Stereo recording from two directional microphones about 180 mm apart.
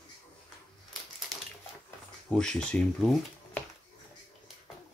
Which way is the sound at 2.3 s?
5° left (ahead or behind).